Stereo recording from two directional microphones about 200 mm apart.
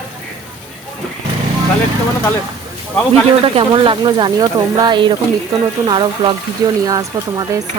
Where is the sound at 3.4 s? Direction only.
25° right (ahead or behind).